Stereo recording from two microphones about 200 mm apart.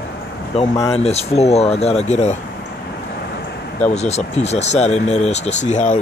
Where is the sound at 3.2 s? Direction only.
55° left (ahead or behind).